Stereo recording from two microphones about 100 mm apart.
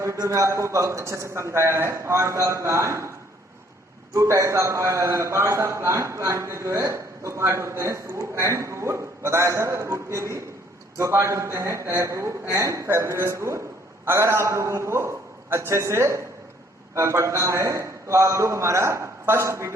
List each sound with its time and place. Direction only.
0.0 s a man's voice: 30° right (ahead or behind)
4.1 s a man's voice: 30° right (ahead or behind)